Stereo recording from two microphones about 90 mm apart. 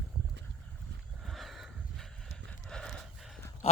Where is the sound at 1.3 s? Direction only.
Centre (ahead or behind).